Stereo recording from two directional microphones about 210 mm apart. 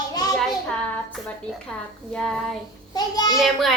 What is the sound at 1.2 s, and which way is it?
A woman's voice, 5° left (ahead or behind).